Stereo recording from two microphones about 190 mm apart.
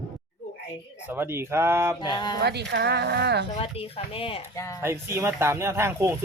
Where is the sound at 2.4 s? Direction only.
65° right (ahead or behind).